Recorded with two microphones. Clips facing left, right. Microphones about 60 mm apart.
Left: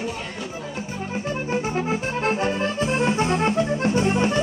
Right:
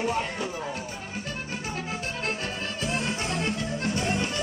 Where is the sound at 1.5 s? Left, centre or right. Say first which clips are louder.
Left 11 dB; left.